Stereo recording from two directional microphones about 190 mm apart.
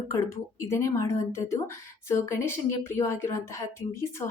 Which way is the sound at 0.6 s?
15° left (ahead or behind).